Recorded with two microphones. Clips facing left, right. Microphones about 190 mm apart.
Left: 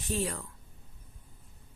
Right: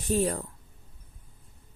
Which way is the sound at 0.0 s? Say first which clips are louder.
Right 7 dB; 40° right (ahead or behind).